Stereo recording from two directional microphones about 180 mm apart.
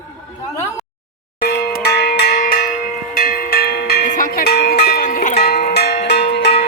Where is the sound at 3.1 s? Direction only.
50° left (ahead or behind); by 5.0 s 70° left (ahead or behind).